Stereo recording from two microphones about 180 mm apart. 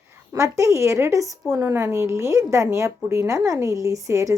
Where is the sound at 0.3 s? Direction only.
15° right (ahead or behind).